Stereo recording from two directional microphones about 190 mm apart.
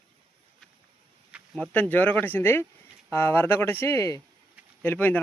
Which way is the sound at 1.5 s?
10° left (ahead or behind).